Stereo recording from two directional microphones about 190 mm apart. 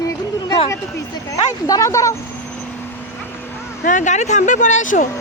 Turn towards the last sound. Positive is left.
turn(degrees=45)  # may be behind; listen again after turning